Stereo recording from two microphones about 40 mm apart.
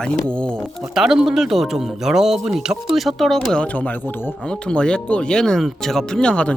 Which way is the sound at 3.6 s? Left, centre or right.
Left.